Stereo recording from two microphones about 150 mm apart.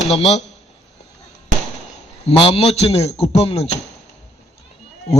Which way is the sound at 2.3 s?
40° left (ahead or behind).